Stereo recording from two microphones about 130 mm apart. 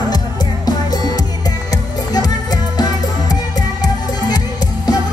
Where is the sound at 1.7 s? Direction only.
30° left (ahead or behind).